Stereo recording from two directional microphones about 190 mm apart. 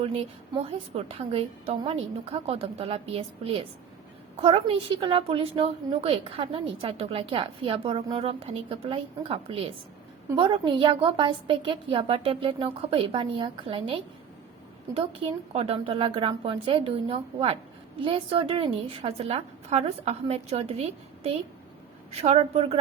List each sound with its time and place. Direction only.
0.0 s a woman's voice: 30° right (ahead or behind)
15.5 s a woman's voice: 30° right (ahead or behind)
22.1 s a woman's voice: 35° right (ahead or behind)